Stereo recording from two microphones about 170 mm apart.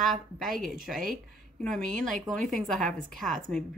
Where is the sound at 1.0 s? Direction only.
55° right (ahead or behind).